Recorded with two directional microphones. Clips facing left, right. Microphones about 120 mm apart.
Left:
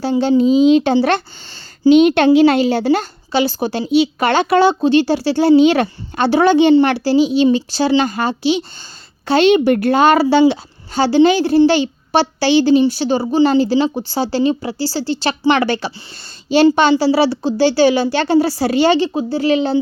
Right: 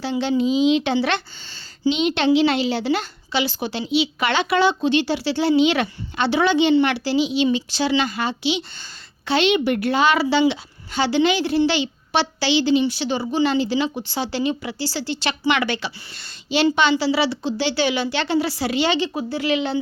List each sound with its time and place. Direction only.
0.0 s a woman's voice: 40° left (ahead or behind)